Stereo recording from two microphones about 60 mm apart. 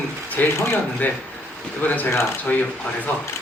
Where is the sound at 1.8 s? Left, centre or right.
Left.